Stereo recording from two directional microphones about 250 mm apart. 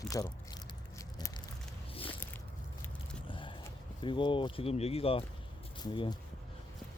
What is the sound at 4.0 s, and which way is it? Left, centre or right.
Speech, centre.